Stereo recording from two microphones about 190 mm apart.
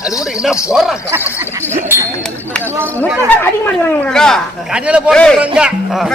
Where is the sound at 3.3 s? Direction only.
10° left (ahead or behind).